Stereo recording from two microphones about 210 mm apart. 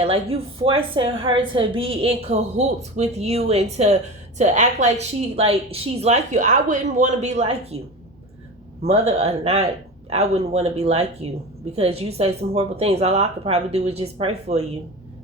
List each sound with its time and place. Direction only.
0.0 s a woman's voice: 30° right (ahead or behind)
8.9 s a woman's voice: 30° right (ahead or behind)